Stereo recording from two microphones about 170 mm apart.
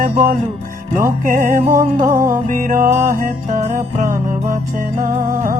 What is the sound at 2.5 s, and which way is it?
Music, 50° right (ahead or behind).